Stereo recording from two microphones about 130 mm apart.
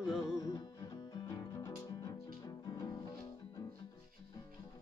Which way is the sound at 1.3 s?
25° left (ahead or behind).